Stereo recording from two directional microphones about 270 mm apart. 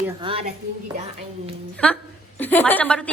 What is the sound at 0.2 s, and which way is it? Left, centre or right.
Speech, centre.